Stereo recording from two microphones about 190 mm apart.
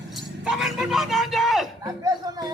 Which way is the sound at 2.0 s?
20° right (ahead or behind).